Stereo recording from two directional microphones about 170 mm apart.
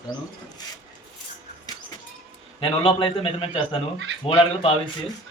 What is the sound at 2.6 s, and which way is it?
A man's voice, 30° left (ahead or behind).